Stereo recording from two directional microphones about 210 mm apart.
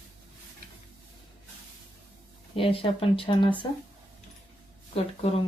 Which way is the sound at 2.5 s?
25° left (ahead or behind).